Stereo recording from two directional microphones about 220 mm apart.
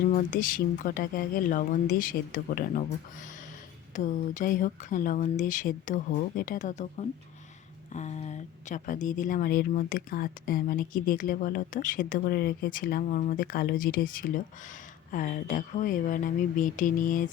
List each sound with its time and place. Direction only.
0.1 s speech: 35° left (ahead or behind)
3.9 s speech: 35° left (ahead or behind)